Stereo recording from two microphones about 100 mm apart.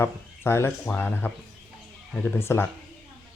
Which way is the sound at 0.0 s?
25° left (ahead or behind).